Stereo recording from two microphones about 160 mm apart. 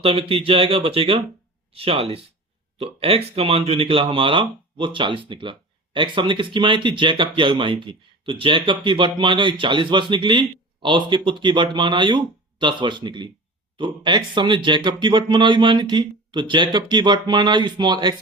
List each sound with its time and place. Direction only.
0.0 s speech: 35° right (ahead or behind)